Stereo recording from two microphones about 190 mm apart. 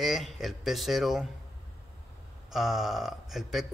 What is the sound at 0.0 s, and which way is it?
Speech, centre (ahead or behind).